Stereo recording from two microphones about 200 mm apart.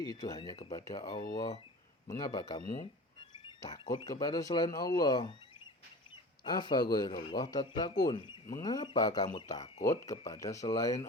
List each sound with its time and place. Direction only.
0.0 s speech: 20° left (ahead or behind)
6.4 s speech: 20° left (ahead or behind)